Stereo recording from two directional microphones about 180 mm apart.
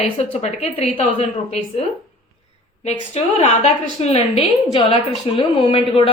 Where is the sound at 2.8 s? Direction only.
40° left (ahead or behind).